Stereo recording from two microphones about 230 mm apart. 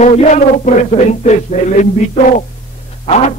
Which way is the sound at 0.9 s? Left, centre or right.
Left.